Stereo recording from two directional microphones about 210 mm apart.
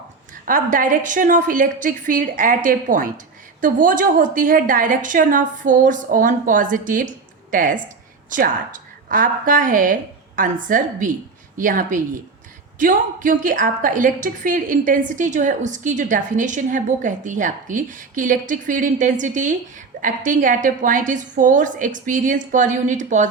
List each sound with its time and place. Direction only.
0.4 s a woman's voice: 40° right (ahead or behind)